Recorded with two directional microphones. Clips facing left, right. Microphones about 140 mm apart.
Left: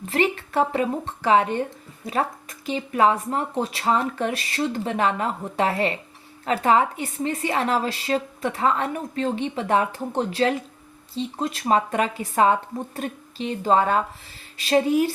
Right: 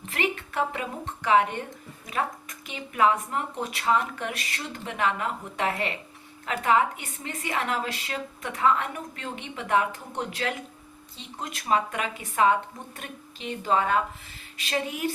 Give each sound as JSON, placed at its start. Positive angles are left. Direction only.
{"t": 0.1, "sound": "a woman's voice", "side_deg": 35}